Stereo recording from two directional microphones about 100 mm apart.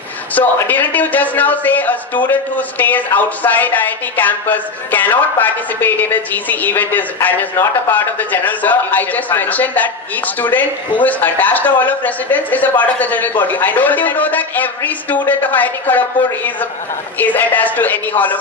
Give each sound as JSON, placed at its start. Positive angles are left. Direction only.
{"t": 0.3, "sound": "speech", "side_deg": 15}